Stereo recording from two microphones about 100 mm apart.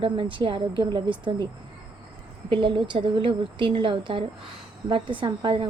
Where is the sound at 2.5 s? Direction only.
60° right (ahead or behind).